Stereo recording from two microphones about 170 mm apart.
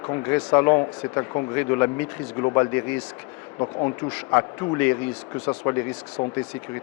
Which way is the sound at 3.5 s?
30° left (ahead or behind).